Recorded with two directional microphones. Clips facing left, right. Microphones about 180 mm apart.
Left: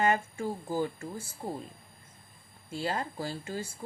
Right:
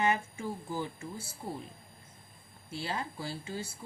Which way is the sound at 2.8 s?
50° left (ahead or behind).